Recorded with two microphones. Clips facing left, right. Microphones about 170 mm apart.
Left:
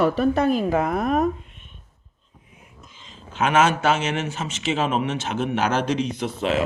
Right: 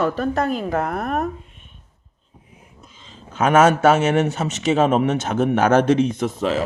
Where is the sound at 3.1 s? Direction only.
40° right (ahead or behind).